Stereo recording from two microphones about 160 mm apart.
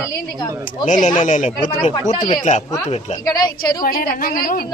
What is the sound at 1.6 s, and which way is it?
Speech, 30° left (ahead or behind).